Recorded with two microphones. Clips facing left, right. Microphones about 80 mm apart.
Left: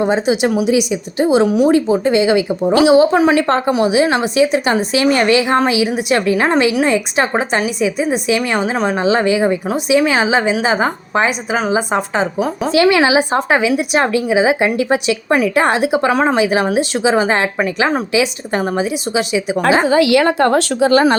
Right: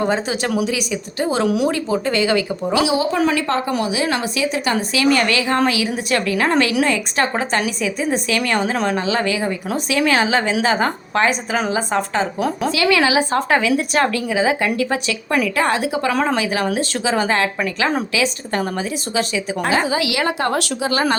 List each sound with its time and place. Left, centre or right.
0.0 s a woman's voice: centre
2.7 s a woman's voice: left
3.8 s a woman's voice: left; by 9.0 s centre
9.0 s a woman's voice: left
9.6 s a woman's voice: centre
10.0 s a woman's voice: left
12.6 s a woman's voice: left; by 19.5 s centre
19.8 s a woman's voice: left